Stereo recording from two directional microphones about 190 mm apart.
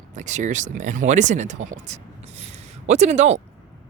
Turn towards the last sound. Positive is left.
turn(degrees=-35)  # may be behind; listen again after turning